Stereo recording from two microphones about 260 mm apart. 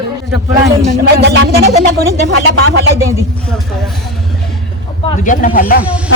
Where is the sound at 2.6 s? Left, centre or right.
Right.